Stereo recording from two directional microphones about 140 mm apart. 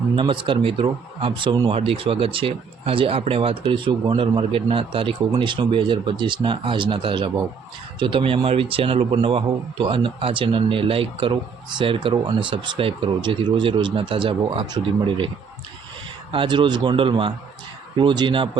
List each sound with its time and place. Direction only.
0.2 s speech: 35° right (ahead or behind)
16.3 s speech: 35° right (ahead or behind)